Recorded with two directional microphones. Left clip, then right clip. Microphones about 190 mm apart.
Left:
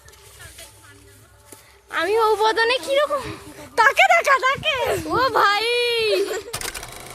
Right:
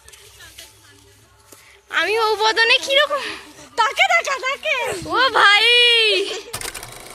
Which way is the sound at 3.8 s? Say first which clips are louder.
Left 2 dB; 50° left (ahead or behind).